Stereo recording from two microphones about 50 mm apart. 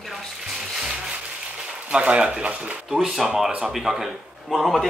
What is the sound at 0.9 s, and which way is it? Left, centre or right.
Speech, centre.